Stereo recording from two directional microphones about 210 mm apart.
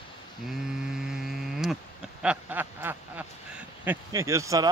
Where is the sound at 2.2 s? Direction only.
5° right (ahead or behind).